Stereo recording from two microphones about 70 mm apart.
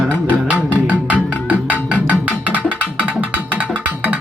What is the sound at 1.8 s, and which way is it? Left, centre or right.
Music, left.